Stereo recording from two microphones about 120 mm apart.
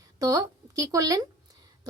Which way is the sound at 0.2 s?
30° right (ahead or behind).